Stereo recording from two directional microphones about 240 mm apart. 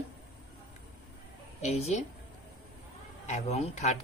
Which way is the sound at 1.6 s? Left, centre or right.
Left.